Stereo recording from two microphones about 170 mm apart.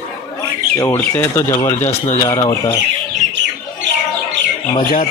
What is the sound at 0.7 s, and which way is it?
Speech, 15° left (ahead or behind).